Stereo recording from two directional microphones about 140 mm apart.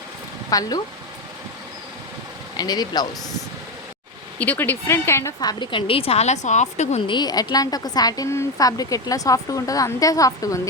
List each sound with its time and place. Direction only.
0.5 s a woman's voice: 25° left (ahead or behind)
2.6 s a woman's voice: 30° left (ahead or behind)
4.4 s a woman's voice: 10° left (ahead or behind); by 7.0 s 55° left (ahead or behind)
7.1 s a woman's voice: 30° left (ahead or behind)